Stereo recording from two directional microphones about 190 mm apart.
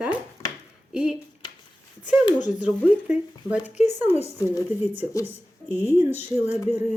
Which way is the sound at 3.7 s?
35° left (ahead or behind).